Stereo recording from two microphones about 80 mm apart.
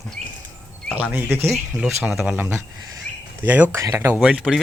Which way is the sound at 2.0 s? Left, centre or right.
Centre.